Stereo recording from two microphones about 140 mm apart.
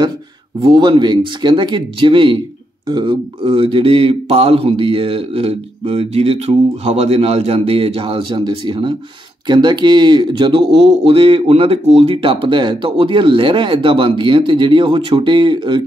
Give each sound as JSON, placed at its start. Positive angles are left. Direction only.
{"t": 0.6, "sound": "speech", "side_deg": -35}